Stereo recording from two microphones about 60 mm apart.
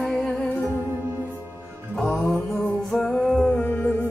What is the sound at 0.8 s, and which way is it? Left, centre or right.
Music, right.